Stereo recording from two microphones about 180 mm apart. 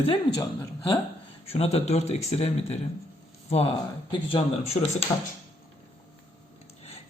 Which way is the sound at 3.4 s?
35° left (ahead or behind).